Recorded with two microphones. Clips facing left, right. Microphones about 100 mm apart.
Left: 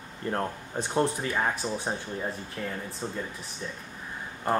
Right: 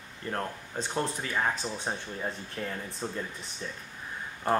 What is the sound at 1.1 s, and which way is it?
Speech, 15° left (ahead or behind).